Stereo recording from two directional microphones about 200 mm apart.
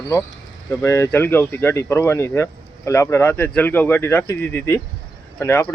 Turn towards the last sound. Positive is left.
turn(degrees=10)  # may be behind; listen again after turning